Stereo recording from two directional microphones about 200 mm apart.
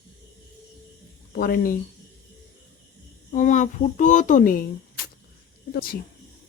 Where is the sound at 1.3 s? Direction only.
45° left (ahead or behind).